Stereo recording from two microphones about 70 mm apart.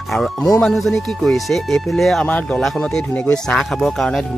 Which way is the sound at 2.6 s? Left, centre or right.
Centre.